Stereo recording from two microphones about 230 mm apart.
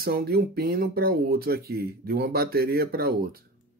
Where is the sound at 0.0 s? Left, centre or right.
Right.